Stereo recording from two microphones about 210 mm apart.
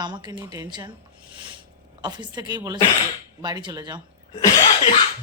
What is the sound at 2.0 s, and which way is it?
A woman's voice, 20° right (ahead or behind).